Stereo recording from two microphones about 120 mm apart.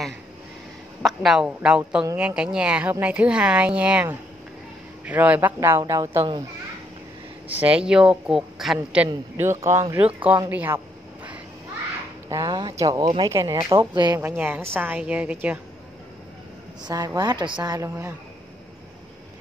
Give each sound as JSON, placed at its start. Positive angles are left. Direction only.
{"t": 1.0, "sound": "speech", "side_deg": -5}
{"t": 7.5, "sound": "speech", "side_deg": -10}
{"t": 9.4, "sound": "speech", "side_deg": -20}
{"t": 12.3, "sound": "a woman's voice", "side_deg": -30}
{"t": 14.2, "sound": "speech", "side_deg": -20}
{"t": 16.8, "sound": "a woman's voice", "side_deg": -30}
{"t": 17.7, "sound": "speech", "side_deg": -20}